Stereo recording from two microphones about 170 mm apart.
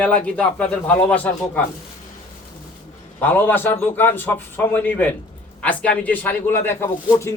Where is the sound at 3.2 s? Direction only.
10° left (ahead or behind).